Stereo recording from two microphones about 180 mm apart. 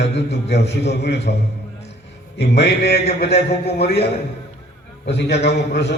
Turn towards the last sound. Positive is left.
turn(degrees=70)  # may be behind; listen again after turning